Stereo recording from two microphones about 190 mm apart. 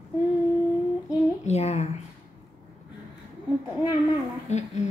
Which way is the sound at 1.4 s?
35° left (ahead or behind).